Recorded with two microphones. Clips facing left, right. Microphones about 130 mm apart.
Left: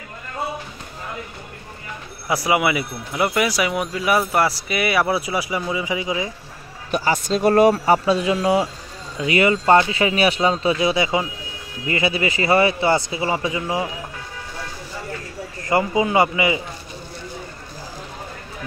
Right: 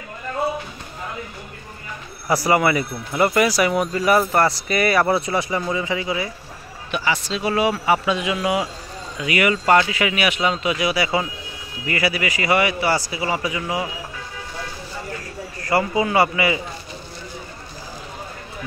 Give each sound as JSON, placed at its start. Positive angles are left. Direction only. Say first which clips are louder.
{"t": 2.2, "sound": "speech", "louder": "right 2 dB", "side_deg": 0}
{"t": 6.9, "sound": "speech", "louder": "left 3 dB", "side_deg": 40}
{"t": 7.7, "sound": "a man's voice", "louder": "left 3 dB", "side_deg": 35}
{"t": 15.6, "sound": "a man's voice", "louder": "left 1 dB", "side_deg": 20}